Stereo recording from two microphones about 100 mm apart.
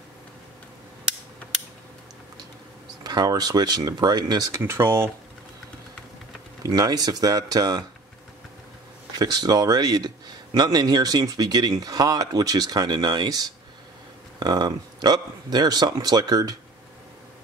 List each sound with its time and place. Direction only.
3.0 s speech: 40° right (ahead or behind)
4.6 s speech: 25° right (ahead or behind)
6.6 s speech: 40° right (ahead or behind)
9.2 s speech: 40° right (ahead or behind)